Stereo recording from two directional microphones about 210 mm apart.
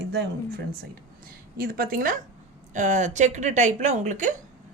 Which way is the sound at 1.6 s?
45° right (ahead or behind).